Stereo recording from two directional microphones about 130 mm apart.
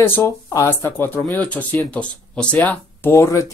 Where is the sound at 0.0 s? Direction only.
20° left (ahead or behind).